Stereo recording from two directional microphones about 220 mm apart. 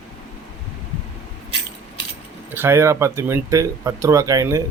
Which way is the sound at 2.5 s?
10° right (ahead or behind).